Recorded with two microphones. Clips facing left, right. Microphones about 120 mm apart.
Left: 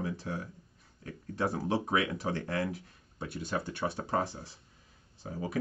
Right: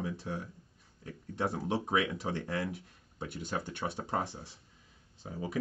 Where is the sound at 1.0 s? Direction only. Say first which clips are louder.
Left 2 dB; 20° right (ahead or behind).